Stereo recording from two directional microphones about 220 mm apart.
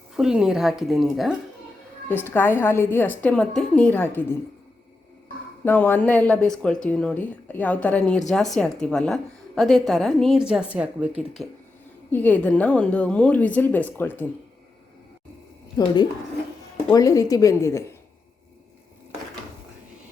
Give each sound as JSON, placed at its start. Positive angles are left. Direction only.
{"t": 0.2, "sound": "a woman's voice", "side_deg": -5}
{"t": 5.6, "sound": "a woman's voice", "side_deg": 10}
{"t": 12.1, "sound": "a woman's voice", "side_deg": 10}
{"t": 16.9, "sound": "a woman's voice", "side_deg": 15}